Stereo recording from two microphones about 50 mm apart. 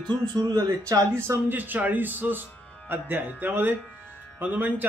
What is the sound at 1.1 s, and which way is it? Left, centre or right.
Speech, right.